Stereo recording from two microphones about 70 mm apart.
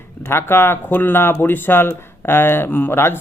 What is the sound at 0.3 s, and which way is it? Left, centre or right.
Speech, left.